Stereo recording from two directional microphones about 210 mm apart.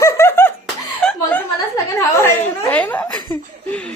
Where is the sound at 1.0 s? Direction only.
10° left (ahead or behind).